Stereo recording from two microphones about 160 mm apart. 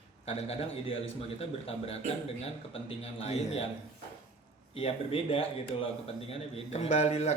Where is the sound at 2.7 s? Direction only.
35° left (ahead or behind).